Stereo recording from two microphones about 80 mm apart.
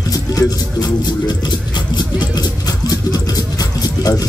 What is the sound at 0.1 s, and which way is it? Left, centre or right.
Music, left.